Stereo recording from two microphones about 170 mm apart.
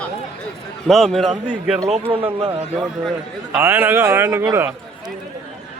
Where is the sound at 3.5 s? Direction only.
10° right (ahead or behind).